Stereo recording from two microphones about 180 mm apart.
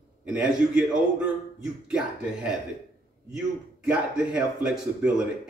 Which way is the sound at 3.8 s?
5° right (ahead or behind).